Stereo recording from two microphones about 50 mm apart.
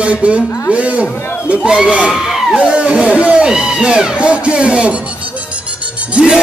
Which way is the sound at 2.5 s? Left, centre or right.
Right.